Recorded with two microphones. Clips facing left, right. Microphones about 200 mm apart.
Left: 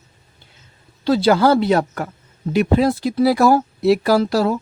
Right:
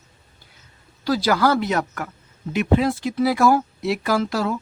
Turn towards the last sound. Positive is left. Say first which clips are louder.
# left 6 dB
turn(degrees=35)  # may be behind; listen again after turning